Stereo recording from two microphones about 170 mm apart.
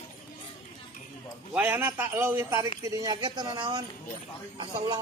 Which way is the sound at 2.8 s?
20° right (ahead or behind).